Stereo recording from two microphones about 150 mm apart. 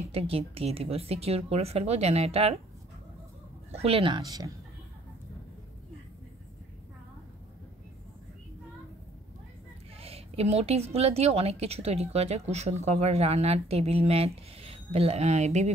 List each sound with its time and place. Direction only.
0.1 s speech: 40° right (ahead or behind)
3.7 s speech: 40° right (ahead or behind)
9.9 s a woman's voice: 40° right (ahead or behind)